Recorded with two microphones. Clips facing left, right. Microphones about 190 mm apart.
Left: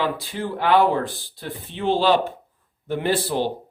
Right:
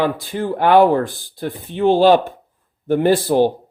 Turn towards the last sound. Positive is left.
turn(degrees=-50)  # may be behind; listen again after turning